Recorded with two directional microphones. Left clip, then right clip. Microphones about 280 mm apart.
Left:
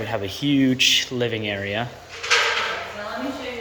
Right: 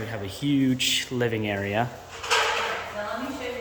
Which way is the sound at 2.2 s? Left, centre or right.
Right.